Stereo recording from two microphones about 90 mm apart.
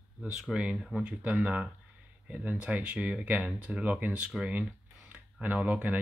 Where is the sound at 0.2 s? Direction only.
10° right (ahead or behind).